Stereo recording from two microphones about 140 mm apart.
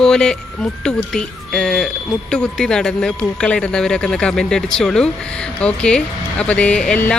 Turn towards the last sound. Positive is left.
turn(degrees=5)  # may be behind; listen again after turning